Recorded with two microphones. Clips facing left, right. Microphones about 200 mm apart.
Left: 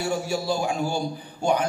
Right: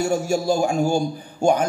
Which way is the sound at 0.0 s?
45° right (ahead or behind).